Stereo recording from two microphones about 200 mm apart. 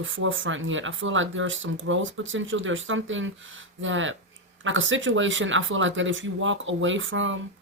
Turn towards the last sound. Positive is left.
turn(degrees=-75)  # may be behind; listen again after turning